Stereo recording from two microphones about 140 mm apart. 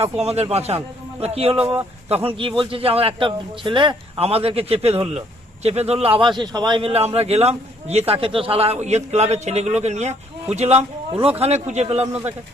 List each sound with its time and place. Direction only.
0.0 s a man's voice: 45° right (ahead or behind)